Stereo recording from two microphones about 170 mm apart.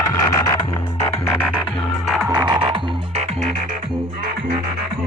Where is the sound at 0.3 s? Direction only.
20° left (ahead or behind).